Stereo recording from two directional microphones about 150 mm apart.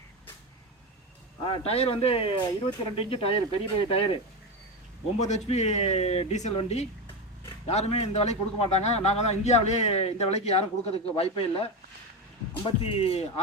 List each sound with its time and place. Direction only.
1.5 s speech: 40° left (ahead or behind)
5.2 s a man's voice: 50° left (ahead or behind)